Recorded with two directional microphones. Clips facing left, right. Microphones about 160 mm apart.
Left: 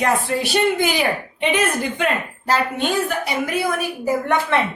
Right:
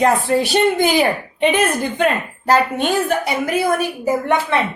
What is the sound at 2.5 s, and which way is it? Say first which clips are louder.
Speech: right 4 dB; 50° right (ahead or behind).